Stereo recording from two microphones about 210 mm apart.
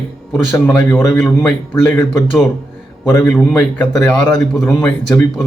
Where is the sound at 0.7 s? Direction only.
10° left (ahead or behind).